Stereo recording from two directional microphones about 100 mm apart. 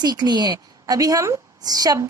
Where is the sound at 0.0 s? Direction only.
45° right (ahead or behind).